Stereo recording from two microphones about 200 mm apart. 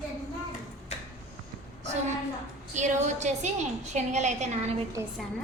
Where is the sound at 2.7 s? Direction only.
35° right (ahead or behind).